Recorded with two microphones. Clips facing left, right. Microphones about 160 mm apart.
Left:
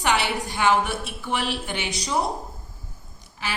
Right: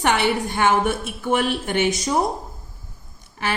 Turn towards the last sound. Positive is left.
turn(degrees=-55)  # may be behind; listen again after turning